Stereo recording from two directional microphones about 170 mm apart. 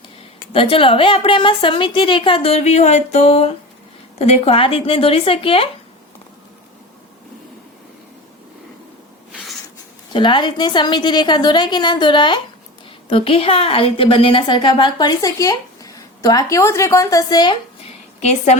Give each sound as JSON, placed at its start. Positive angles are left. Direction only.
{"t": 0.5, "sound": "a woman's voice", "side_deg": 30}
{"t": 10.1, "sound": "a woman's voice", "side_deg": 30}
{"t": 18.2, "sound": "a woman's voice", "side_deg": 40}